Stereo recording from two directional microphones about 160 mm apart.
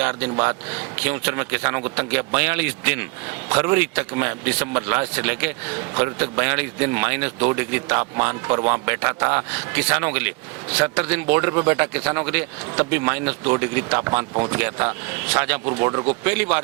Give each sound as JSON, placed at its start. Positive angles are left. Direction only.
{"t": 0.0, "sound": "a man's voice", "side_deg": -10}
{"t": 15.8, "sound": "speech", "side_deg": -25}
{"t": 16.2, "sound": "a man's voice", "side_deg": -10}